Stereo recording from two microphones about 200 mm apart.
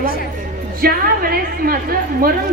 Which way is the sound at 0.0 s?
45° left (ahead or behind).